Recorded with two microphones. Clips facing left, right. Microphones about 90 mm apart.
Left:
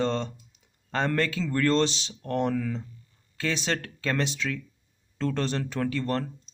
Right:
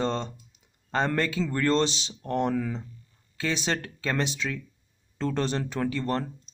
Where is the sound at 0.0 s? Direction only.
10° right (ahead or behind).